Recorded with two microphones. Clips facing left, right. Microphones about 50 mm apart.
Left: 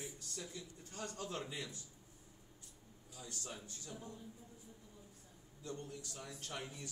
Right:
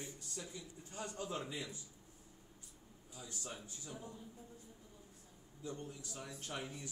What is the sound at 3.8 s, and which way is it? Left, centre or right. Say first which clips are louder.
Speech: right 2 dB; centre.